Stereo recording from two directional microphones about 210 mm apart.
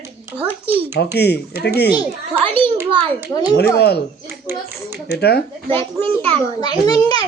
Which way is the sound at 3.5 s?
50° left (ahead or behind).